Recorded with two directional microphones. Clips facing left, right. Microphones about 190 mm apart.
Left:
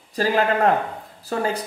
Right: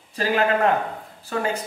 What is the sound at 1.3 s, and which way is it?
Speech, 35° left (ahead or behind).